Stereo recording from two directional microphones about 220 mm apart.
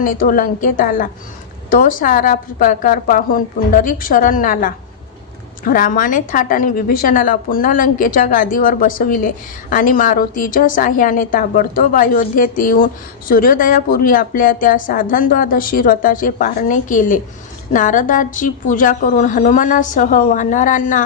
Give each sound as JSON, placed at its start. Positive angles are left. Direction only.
{"t": 0.0, "sound": "a woman's voice", "side_deg": 40}